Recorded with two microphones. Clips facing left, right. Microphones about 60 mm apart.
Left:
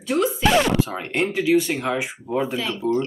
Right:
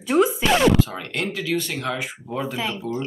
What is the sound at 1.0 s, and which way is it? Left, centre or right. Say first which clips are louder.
Speech: left 4 dB; left.